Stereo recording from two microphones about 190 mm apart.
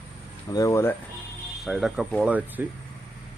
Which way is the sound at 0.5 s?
15° left (ahead or behind).